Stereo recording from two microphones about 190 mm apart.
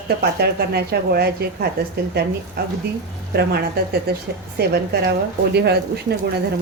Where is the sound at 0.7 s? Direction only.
55° right (ahead or behind).